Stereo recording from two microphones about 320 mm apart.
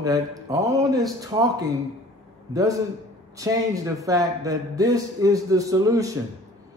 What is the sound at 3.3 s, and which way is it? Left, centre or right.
A man's voice, centre.